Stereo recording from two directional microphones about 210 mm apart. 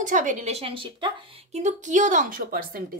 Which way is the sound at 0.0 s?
35° right (ahead or behind).